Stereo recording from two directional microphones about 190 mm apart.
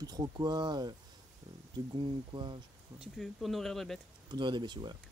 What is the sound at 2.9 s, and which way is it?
Speech, centre (ahead or behind).